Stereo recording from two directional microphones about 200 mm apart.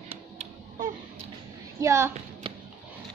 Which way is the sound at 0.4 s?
40° right (ahead or behind).